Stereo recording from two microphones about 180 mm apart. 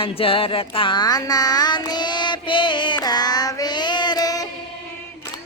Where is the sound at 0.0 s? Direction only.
30° left (ahead or behind).